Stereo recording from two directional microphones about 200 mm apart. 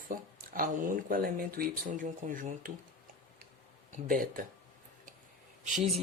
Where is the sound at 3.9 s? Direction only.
45° right (ahead or behind).